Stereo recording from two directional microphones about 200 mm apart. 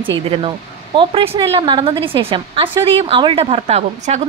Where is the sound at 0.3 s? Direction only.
25° right (ahead or behind).